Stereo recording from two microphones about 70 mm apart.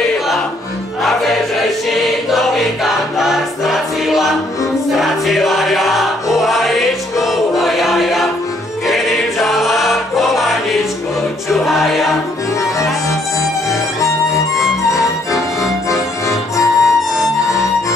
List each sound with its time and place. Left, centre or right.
1.0 s choir: centre
4.9 s music: centre
13.7 s music: left